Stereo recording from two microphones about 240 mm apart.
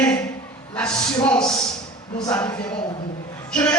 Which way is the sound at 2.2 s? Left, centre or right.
Centre.